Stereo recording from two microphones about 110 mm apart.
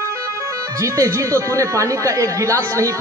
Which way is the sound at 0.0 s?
25° right (ahead or behind).